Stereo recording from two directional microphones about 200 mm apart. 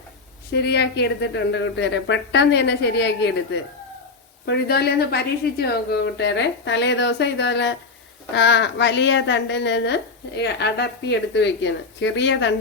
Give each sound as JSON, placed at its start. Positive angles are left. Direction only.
{"t": 0.5, "sound": "a woman's voice", "side_deg": 55}